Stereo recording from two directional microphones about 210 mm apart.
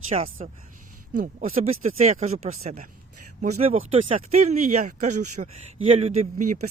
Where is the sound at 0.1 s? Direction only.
35° right (ahead or behind).